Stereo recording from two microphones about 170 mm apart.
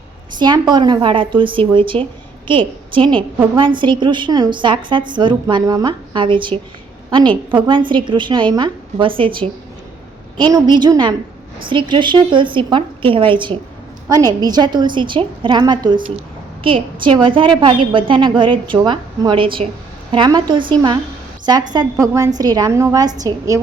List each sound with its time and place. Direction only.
0.3 s a woman's voice: 25° right (ahead or behind)